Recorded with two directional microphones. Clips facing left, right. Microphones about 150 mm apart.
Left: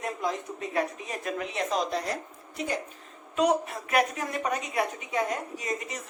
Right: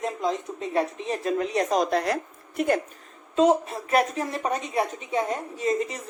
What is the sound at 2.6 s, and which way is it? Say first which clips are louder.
Speech: right 8 dB; 55° right (ahead or behind).